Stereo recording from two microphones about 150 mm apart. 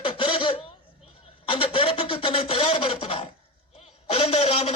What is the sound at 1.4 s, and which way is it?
Speech, 35° left (ahead or behind).